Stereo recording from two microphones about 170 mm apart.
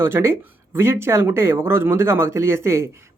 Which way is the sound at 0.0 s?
15° right (ahead or behind).